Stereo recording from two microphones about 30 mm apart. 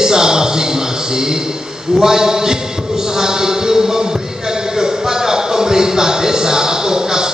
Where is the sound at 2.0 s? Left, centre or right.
Centre.